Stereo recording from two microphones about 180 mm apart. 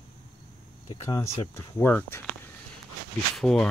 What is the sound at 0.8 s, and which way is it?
Speech, 20° left (ahead or behind).